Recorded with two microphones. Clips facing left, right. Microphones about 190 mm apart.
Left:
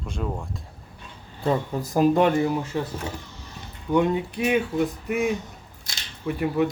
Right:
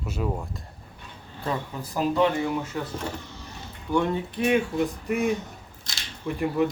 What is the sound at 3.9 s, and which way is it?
Speech, 15° left (ahead or behind).